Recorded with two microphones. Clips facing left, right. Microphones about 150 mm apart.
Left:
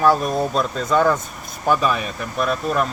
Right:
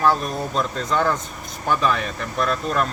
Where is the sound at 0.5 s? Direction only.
10° left (ahead or behind).